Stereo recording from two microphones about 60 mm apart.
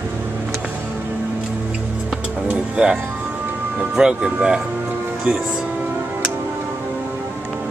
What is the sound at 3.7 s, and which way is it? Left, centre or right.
Speech, centre.